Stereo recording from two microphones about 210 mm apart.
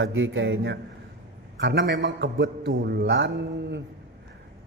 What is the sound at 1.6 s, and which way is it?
A man's voice, 50° right (ahead or behind).